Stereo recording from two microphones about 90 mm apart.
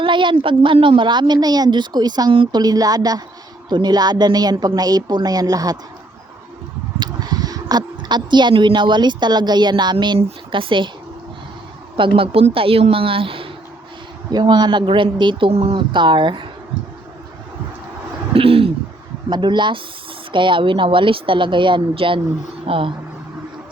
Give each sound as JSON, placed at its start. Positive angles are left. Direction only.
{"t": 0.0, "sound": "a woman's voice", "side_deg": -65}
{"t": 2.3, "sound": "a woman's voice", "side_deg": -70}
{"t": 2.6, "sound": "a woman's voice", "side_deg": -45}
{"t": 7.0, "sound": "speech", "side_deg": -50}
{"t": 10.2, "sound": "a woman's voice", "side_deg": -70}
{"t": 11.9, "sound": "a woman's voice", "side_deg": -80}
{"t": 14.3, "sound": "a woman's voice", "side_deg": -50}
{"t": 18.3, "sound": "a woman's voice", "side_deg": -90}
{"t": 19.3, "sound": "a woman's voice", "side_deg": -60}
{"t": 22.6, "sound": "speech", "side_deg": -90}